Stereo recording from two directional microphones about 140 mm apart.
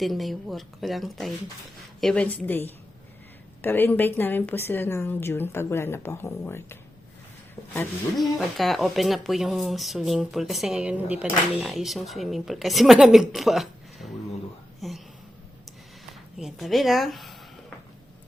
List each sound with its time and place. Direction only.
0.0 s a woman's voice: centre (ahead or behind); by 6.7 s 15° left (ahead or behind)
8.1 s speech: centre (ahead or behind)
16.4 s speech: centre (ahead or behind)